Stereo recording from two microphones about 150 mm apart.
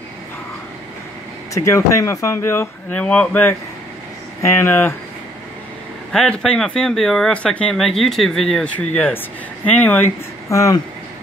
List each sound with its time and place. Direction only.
1.5 s speech: 20° left (ahead or behind)
6.1 s speech: 5° left (ahead or behind); by 10.8 s 20° left (ahead or behind)